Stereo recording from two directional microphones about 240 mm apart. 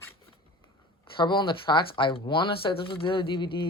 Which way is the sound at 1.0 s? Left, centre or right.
Centre.